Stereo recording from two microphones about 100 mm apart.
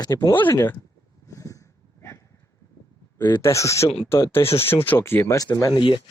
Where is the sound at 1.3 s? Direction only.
35° left (ahead or behind).